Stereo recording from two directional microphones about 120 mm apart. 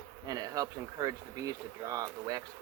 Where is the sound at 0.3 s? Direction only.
30° right (ahead or behind).